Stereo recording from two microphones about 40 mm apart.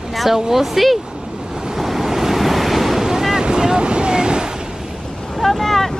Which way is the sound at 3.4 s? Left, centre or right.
Centre.